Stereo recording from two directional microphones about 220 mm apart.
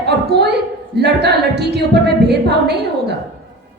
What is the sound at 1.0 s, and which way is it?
A woman's voice, 50° right (ahead or behind).